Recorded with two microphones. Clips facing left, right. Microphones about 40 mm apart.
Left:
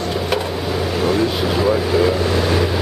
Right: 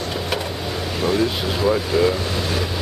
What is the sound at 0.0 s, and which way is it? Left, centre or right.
Vehicle, centre.